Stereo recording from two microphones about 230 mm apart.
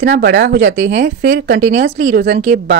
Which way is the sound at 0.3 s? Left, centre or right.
Right.